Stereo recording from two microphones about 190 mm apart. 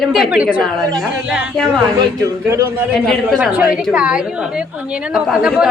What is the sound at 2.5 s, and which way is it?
Speech, 15° right (ahead or behind).